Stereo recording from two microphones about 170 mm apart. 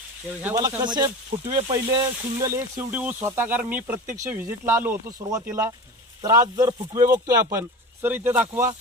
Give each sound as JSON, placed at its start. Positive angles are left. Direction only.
{"t": 0.4, "sound": "speech", "side_deg": -10}
{"t": 0.7, "sound": "speech", "side_deg": -25}